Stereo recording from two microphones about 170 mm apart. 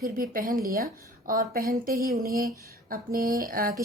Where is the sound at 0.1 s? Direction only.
55° right (ahead or behind).